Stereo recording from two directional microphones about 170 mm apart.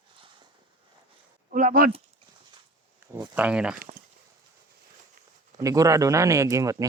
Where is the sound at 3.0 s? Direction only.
20° right (ahead or behind).